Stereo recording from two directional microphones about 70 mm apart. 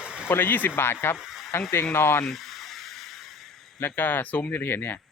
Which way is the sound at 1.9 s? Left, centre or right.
Left.